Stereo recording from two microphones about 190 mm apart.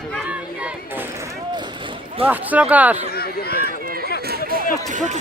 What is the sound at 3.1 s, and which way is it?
Speech, 55° left (ahead or behind).